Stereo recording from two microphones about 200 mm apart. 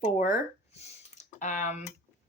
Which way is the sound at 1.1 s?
35° left (ahead or behind).